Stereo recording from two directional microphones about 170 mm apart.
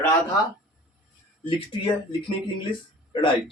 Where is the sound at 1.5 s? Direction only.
30° left (ahead or behind).